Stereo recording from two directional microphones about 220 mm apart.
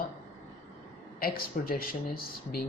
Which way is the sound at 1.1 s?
40° left (ahead or behind).